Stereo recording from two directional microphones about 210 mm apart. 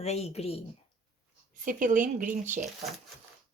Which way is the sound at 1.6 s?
40° right (ahead or behind).